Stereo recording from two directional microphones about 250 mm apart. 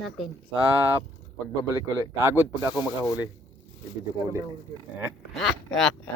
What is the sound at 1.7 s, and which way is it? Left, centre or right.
Speech, centre.